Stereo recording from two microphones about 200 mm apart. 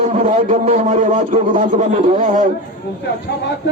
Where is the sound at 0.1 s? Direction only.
35° right (ahead or behind).